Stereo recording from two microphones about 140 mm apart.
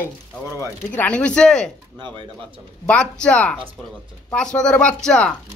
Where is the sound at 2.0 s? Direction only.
35° right (ahead or behind).